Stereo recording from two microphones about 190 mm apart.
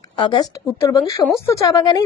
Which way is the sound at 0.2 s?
25° left (ahead or behind).